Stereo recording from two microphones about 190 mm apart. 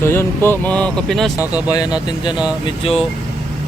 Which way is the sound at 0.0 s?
15° left (ahead or behind).